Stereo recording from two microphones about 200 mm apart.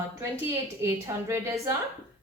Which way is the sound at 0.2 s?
15° right (ahead or behind).